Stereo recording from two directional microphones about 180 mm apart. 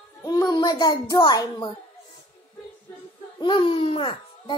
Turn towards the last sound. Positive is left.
turn(degrees=25)  # may be behind; listen again after turning